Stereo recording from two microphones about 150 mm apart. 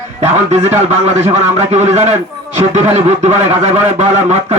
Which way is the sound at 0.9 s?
50° right (ahead or behind).